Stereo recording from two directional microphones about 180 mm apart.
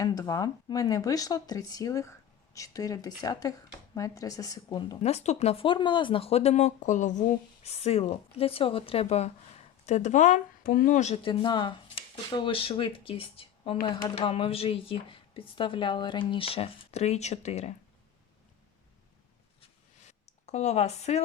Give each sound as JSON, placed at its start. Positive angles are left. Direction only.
{"t": 0.0, "sound": "speech", "side_deg": 20}
{"t": 20.5, "sound": "speech", "side_deg": 35}